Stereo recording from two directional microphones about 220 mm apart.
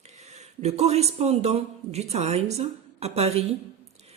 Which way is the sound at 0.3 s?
30° right (ahead or behind).